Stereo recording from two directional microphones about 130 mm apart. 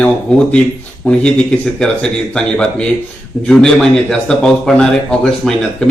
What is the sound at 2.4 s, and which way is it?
A man's voice, 5° left (ahead or behind).